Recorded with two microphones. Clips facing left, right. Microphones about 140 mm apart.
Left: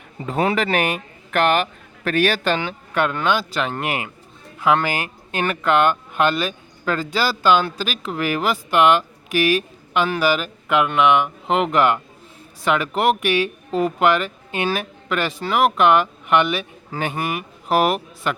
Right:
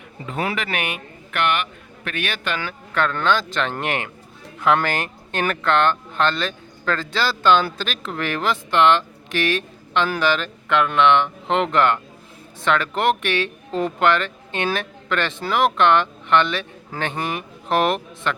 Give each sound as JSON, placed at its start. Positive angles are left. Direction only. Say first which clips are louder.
{"t": 0.3, "sound": "speech", "louder": "left 6 dB", "side_deg": 35}
{"t": 2.6, "sound": "speech", "louder": "left 2 dB", "side_deg": 15}